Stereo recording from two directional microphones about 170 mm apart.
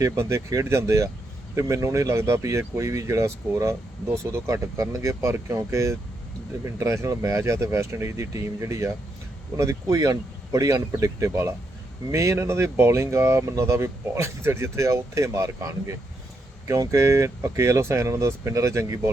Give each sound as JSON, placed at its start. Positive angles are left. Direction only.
{"t": 0.0, "sound": "speech", "side_deg": -15}